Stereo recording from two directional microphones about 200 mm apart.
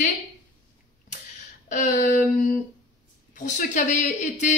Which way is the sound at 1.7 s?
35° left (ahead or behind).